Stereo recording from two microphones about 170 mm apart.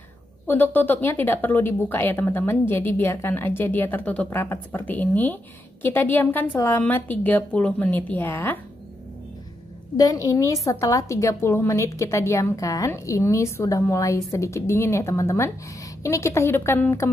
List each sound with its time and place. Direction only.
0.5 s speech: 10° left (ahead or behind)
9.9 s speech: 20° left (ahead or behind)